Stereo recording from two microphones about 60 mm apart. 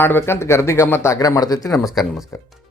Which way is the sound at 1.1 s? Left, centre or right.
Left.